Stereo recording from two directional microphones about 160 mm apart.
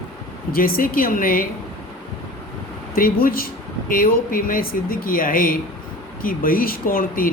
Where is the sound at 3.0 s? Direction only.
65° left (ahead or behind).